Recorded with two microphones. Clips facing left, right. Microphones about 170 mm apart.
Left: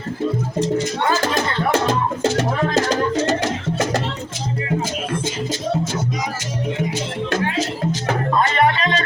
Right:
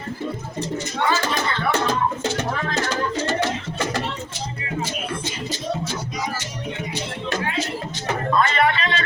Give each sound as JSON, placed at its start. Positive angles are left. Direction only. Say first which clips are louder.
{"t": 1.0, "sound": "a sound", "louder": "right 1 dB", "side_deg": 45}
{"t": 1.9, "sound": "music", "louder": "left 4 dB", "side_deg": 35}
{"t": 8.4, "sound": "music", "louder": "left 2 dB", "side_deg": 40}